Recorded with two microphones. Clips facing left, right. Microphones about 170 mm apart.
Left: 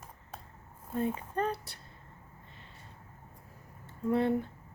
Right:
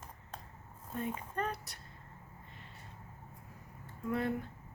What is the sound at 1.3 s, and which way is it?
Speech, 30° left (ahead or behind).